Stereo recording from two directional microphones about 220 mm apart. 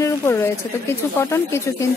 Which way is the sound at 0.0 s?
10° left (ahead or behind).